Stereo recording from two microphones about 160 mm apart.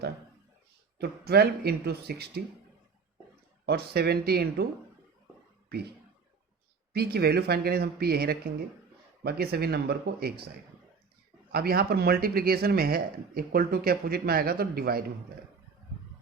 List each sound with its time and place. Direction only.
0.9 s speech: 85° right
3.7 s speech: 85° right
6.9 s speech: 85° right
11.5 s speech: 75° right (ahead or behind)